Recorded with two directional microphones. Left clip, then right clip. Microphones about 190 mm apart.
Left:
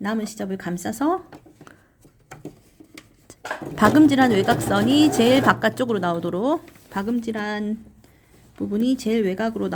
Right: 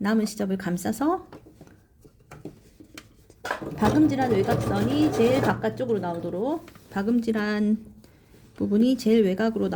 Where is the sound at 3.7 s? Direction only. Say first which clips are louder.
Left 7 dB; 40° left (ahead or behind).